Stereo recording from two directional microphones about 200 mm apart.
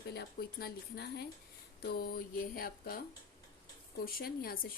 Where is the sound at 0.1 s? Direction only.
50° left (ahead or behind).